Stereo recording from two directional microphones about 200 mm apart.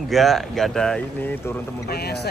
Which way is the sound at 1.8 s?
55° left (ahead or behind).